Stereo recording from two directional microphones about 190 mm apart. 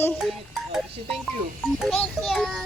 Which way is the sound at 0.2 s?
Centre (ahead or behind).